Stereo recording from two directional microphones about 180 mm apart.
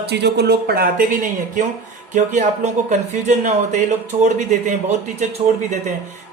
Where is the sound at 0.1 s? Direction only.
65° right (ahead or behind); by 1.6 s 50° right (ahead or behind).